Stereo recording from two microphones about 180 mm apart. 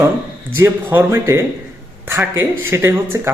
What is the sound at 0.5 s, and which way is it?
Speech, 10° right (ahead or behind).